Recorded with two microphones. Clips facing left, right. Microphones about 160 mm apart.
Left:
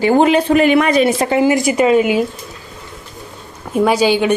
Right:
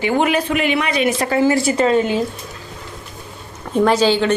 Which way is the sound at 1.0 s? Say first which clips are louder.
Left 3 dB; 20° left (ahead or behind).